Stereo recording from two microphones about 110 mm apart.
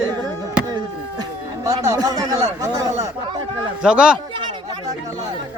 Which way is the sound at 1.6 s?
35° right (ahead or behind).